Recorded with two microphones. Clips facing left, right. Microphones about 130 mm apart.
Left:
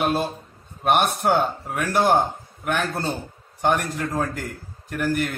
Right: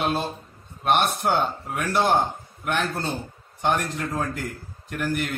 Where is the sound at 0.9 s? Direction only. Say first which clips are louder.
Left 2 dB; 10° left (ahead or behind).